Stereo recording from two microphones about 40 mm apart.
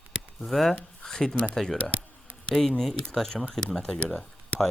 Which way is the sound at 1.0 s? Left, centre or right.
Centre.